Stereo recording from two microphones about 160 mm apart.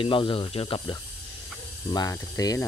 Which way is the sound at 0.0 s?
30° left (ahead or behind).